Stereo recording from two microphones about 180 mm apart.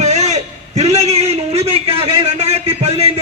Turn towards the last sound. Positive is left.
turn(degrees=-35)  # may be behind; listen again after turning